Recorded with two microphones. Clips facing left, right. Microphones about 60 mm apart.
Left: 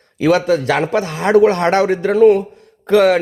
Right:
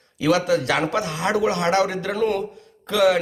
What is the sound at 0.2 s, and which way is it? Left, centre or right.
A man's voice, left.